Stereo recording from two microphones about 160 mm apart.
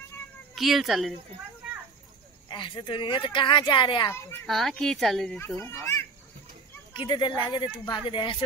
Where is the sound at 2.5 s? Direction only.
30° left (ahead or behind).